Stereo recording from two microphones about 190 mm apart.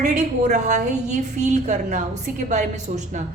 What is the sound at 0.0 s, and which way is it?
A woman's voice, 40° right (ahead or behind).